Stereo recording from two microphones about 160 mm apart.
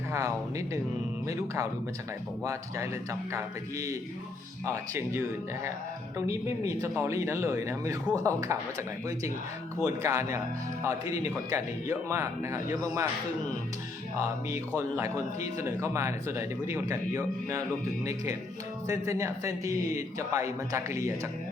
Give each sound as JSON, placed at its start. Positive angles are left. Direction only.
{"t": 0.1, "sound": "a man's voice", "side_deg": -20}
{"t": 9.8, "sound": "a man's voice", "side_deg": -20}
{"t": 14.8, "sound": "a man's voice", "side_deg": -20}